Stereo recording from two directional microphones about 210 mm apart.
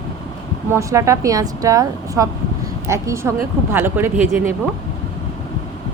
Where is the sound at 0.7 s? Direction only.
15° right (ahead or behind).